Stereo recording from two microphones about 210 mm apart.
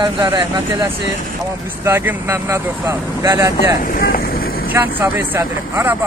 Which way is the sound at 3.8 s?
45° left (ahead or behind).